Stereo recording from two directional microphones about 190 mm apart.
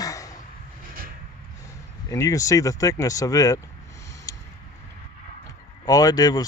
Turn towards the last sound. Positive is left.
turn(degrees=20)  # may be behind; listen again after turning